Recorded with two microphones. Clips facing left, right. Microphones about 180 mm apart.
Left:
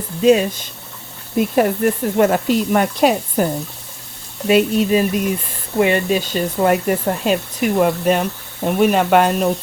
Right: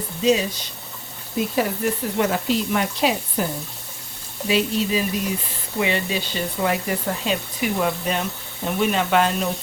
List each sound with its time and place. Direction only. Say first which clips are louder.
0.2 s speech: left 6 dB; 55° left (ahead or behind)
4.4 s speech: left 7 dB; 55° left (ahead or behind)